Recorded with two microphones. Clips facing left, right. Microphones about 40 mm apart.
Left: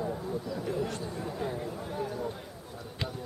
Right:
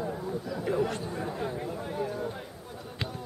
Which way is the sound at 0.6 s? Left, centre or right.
Right.